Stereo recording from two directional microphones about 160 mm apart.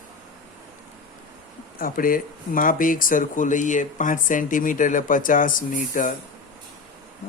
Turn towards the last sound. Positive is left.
turn(degrees=55)  # may be behind; listen again after turning